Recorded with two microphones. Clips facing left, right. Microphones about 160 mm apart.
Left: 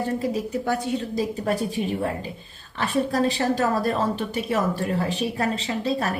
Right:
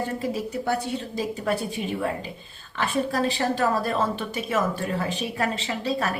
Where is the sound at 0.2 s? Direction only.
40° left (ahead or behind).